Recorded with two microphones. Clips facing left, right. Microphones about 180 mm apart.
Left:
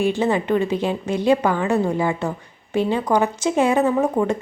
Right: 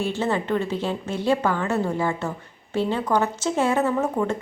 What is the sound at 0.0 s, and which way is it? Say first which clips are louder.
Speech: left 5 dB; 15° left (ahead or behind).